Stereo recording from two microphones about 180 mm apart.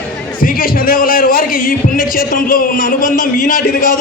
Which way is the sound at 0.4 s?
50° left (ahead or behind).